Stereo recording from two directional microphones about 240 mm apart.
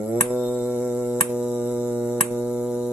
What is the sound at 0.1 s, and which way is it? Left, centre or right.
Hum, centre.